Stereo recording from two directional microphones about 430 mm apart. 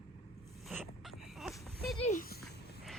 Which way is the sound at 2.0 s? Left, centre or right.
Centre.